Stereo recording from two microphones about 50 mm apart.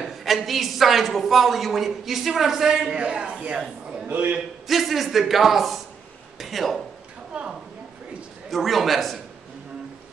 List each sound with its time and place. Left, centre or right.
0.0 s a woman's voice: centre
3.0 s a man's voice: right
4.6 s a woman's voice: centre
7.3 s a sound: centre
8.5 s a woman's voice: centre